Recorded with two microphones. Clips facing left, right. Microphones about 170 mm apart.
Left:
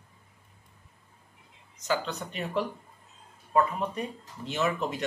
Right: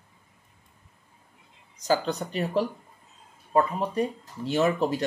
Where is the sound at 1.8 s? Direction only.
35° right (ahead or behind).